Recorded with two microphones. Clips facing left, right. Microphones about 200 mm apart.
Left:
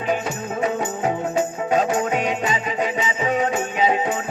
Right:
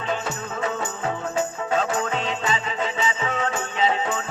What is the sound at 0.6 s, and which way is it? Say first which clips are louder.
Music: left 5 dB; 15° left (ahead or behind).